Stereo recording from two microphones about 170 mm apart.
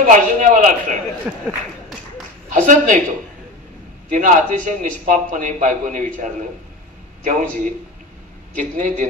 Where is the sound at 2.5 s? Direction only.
50° right (ahead or behind).